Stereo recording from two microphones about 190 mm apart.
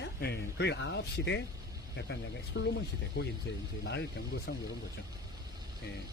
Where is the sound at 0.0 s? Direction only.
60° left (ahead or behind).